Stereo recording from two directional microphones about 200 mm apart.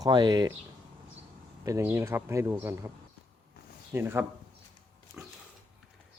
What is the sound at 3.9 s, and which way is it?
Speech, 10° right (ahead or behind).